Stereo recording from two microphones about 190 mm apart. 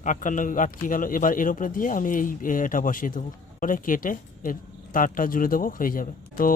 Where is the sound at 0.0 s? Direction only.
40° left (ahead or behind).